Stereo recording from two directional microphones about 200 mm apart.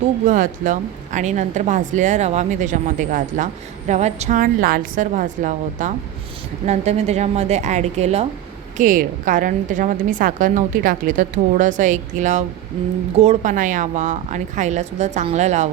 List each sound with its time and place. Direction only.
0.3 s a woman's voice: 40° right (ahead or behind)